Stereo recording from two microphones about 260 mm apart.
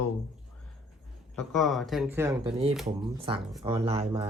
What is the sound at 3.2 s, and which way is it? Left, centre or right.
Speech, right.